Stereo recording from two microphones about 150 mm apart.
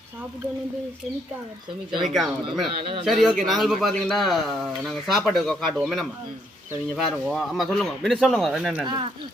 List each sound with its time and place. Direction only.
2.0 s speech: centre (ahead or behind)